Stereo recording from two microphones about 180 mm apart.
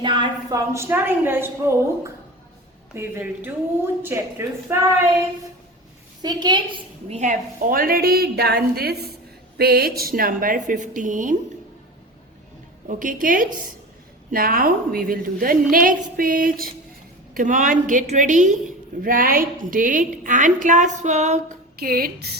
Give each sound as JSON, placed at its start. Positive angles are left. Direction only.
{"t": 0.0, "sound": "a woman's voice", "side_deg": -25}
{"t": 6.2, "sound": "a woman's voice", "side_deg": -25}
{"t": 7.2, "sound": "a woman's voice", "side_deg": -45}
{"t": 12.9, "sound": "a woman's voice", "side_deg": -45}
{"t": 21.8, "sound": "a woman's voice", "side_deg": -55}